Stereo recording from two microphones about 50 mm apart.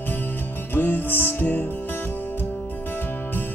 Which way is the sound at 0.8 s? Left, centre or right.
Left.